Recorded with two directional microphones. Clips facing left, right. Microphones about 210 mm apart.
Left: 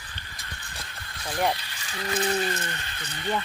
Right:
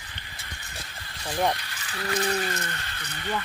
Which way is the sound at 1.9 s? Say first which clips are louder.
Left 1 dB; 25° left (ahead or behind).